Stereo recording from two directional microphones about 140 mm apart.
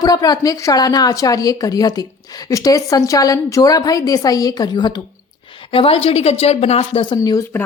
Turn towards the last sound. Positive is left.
turn(degrees=20)  # may be behind; listen again after turning